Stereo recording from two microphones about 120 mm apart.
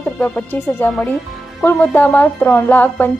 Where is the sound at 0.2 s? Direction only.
15° left (ahead or behind).